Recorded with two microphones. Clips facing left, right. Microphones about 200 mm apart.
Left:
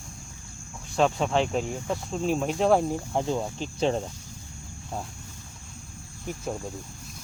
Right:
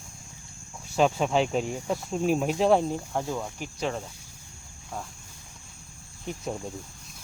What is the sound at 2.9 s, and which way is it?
Speech, 20° left (ahead or behind).